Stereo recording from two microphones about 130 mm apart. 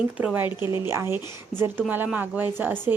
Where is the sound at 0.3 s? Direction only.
15° right (ahead or behind).